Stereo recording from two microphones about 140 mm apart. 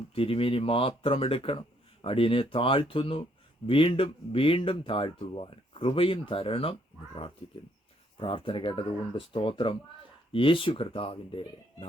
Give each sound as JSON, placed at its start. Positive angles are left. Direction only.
{"t": 0.1, "sound": "speech", "side_deg": 40}
{"t": 8.2, "sound": "speech", "side_deg": 40}